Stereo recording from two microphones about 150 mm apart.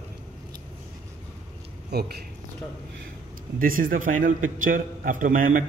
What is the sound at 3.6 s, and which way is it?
A man's voice, 70° right (ahead or behind).